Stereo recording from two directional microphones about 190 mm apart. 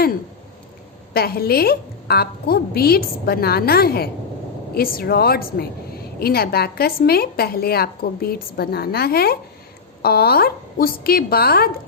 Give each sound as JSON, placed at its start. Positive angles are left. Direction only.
{"t": 1.1, "sound": "a woman's voice", "side_deg": 55}